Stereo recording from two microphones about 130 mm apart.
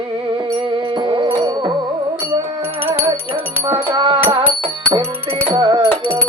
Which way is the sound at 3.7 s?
40° right (ahead or behind).